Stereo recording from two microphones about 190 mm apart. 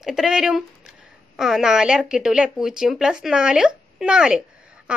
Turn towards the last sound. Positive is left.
turn(degrees=-5)  # may be behind; listen again after turning